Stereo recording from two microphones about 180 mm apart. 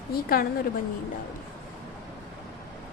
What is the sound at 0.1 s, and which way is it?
Speech, 55° left (ahead or behind).